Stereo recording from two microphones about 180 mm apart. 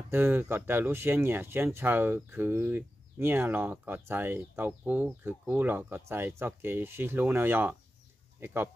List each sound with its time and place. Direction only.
0.1 s speech: 10° right (ahead or behind)